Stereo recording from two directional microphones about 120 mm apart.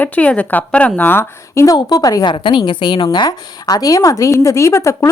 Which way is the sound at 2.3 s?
45° left (ahead or behind).